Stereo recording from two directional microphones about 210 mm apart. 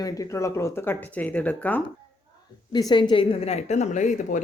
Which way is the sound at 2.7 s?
20° left (ahead or behind).